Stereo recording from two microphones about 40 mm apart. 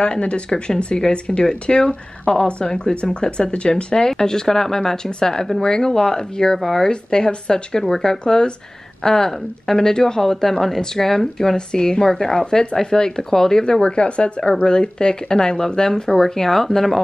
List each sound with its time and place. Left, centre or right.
0.0 s speech: left; by 11.5 s centre
11.5 s speech: left